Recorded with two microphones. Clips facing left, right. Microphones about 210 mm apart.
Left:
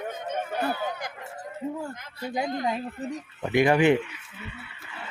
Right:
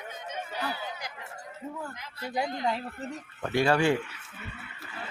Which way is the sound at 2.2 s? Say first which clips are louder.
Left 2 dB; 20° left (ahead or behind).